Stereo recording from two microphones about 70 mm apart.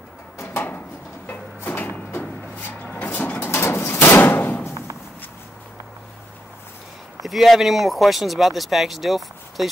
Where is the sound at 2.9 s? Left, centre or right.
Left.